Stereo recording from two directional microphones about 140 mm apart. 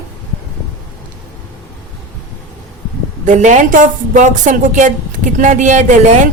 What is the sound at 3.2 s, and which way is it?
A woman's voice, 60° right (ahead or behind).